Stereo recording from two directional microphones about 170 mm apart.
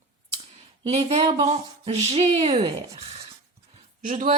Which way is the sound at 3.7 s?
45° right (ahead or behind).